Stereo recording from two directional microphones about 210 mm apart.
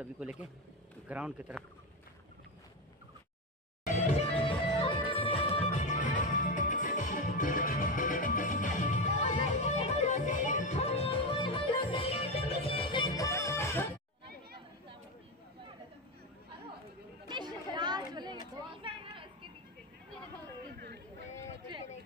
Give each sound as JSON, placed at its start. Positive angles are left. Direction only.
{"t": 0.0, "sound": "speech", "side_deg": -5}
{"t": 3.8, "sound": "music", "side_deg": 35}
{"t": 17.3, "sound": "chatter", "side_deg": -20}
{"t": 18.8, "sound": "a sound", "side_deg": -25}
{"t": 20.7, "sound": "chatter", "side_deg": -50}